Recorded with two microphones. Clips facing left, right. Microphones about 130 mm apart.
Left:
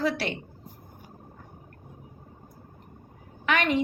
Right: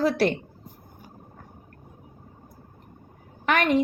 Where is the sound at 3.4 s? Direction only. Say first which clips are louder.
Right 3 dB; 45° right (ahead or behind).